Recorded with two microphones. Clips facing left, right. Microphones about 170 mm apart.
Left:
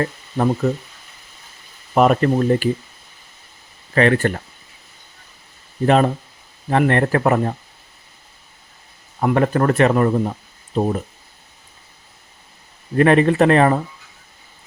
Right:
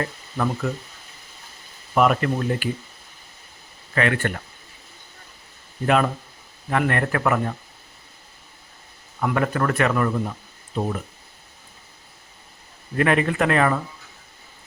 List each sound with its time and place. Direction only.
0.0 s speech: 35° left (ahead or behind)
2.0 s a man's voice: 40° left (ahead or behind)
3.9 s a man's voice: 35° left (ahead or behind)
5.8 s a man's voice: 35° left (ahead or behind)
9.2 s a man's voice: 35° left (ahead or behind)
13.0 s a man's voice: 35° left (ahead or behind)